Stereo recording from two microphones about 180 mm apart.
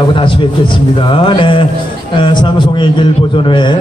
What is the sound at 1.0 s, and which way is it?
A man's voice, 30° left (ahead or behind).